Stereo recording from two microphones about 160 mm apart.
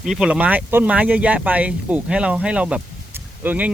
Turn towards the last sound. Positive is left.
turn(degrees=-10)  # may be behind; listen again after turning